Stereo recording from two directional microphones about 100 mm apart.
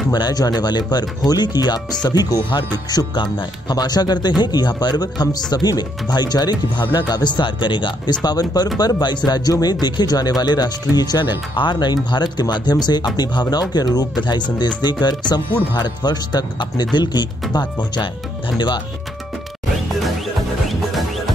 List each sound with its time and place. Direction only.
0.1 s speech: 40° left (ahead or behind)